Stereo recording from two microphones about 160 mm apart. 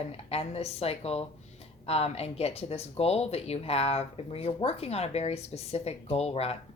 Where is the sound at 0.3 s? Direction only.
40° left (ahead or behind).